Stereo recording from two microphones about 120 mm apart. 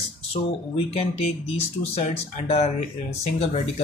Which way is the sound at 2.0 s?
60° left (ahead or behind).